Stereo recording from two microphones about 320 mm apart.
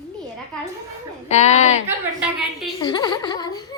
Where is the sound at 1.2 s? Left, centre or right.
Left.